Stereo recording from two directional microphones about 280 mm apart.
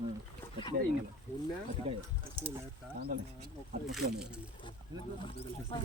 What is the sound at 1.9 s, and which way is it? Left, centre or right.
Speech, right.